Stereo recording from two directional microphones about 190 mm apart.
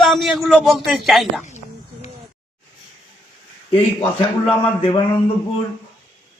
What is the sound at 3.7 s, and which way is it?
A man's voice, 25° left (ahead or behind).